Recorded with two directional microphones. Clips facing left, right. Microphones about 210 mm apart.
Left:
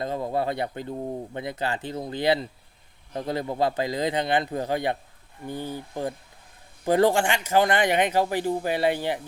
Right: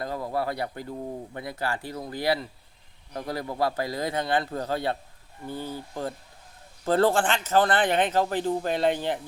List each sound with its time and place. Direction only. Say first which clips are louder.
0.0 s speech: left 3 dB; 20° left (ahead or behind)